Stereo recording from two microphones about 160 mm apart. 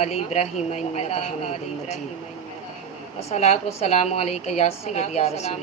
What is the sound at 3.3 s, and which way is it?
A woman's voice, 45° left (ahead or behind).